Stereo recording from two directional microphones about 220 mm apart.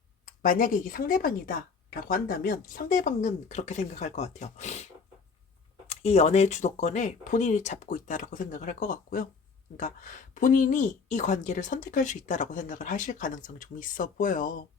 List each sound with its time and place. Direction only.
0.4 s speech: 40° left (ahead or behind)
5.9 s speech: 30° left (ahead or behind)